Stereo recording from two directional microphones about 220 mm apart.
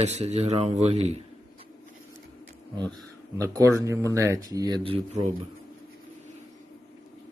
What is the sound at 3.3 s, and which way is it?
Speech, 15° right (ahead or behind).